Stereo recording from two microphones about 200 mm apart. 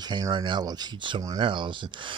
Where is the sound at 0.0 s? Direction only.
20° right (ahead or behind).